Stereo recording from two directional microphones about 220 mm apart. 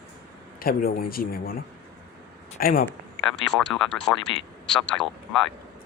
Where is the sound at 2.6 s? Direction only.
40° left (ahead or behind).